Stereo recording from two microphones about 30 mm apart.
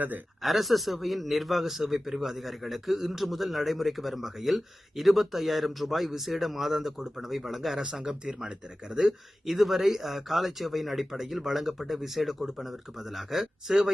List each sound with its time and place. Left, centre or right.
0.4 s a man's voice: centre
7.9 s speech: right
9.0 s a man's voice: centre